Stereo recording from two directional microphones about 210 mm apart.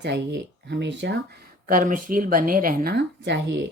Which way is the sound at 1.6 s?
40° right (ahead or behind).